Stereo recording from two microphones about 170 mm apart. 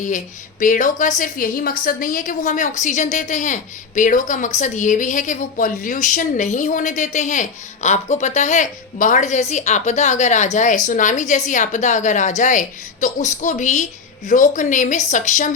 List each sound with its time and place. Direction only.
0.6 s a woman's voice: 50° left (ahead or behind)